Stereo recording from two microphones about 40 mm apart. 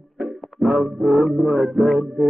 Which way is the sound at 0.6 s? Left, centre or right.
Centre.